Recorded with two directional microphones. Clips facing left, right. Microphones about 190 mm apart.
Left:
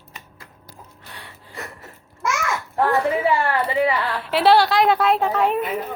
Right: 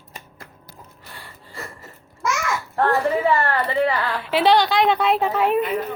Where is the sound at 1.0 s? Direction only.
Centre (ahead or behind).